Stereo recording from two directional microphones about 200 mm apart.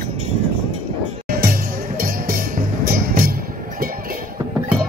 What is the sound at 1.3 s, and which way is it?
Music, 50° right (ahead or behind).